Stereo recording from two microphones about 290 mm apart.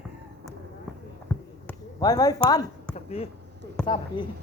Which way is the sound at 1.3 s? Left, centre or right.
Centre.